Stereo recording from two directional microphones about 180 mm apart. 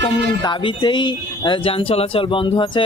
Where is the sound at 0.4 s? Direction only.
25° left (ahead or behind).